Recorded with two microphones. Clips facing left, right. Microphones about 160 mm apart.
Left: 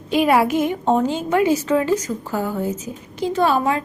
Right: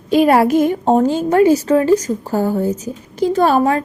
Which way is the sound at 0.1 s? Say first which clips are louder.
Right 5 dB; 40° right (ahead or behind).